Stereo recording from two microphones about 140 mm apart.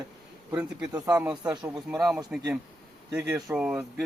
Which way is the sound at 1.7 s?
5° right (ahead or behind).